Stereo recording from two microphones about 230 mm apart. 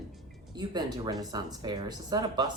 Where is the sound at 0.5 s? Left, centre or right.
Centre.